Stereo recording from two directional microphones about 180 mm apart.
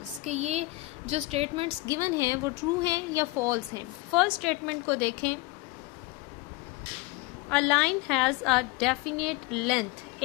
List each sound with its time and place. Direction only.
0.2 s a woman's voice: 40° right (ahead or behind)
1.9 s speech: 15° right (ahead or behind)
4.1 s a woman's voice: centre (ahead or behind)
7.4 s a woman's voice: 5° left (ahead or behind)